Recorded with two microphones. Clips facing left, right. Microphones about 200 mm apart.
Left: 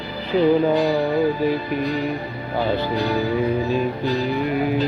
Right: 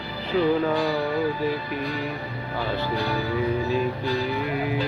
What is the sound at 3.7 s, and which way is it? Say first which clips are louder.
Music: left 3 dB; 20° left (ahead or behind).